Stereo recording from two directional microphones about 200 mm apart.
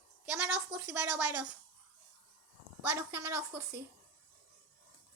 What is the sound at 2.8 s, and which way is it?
A woman's voice, 10° right (ahead or behind).